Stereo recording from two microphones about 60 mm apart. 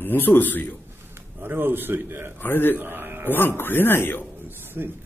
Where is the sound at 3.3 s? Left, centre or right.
Left.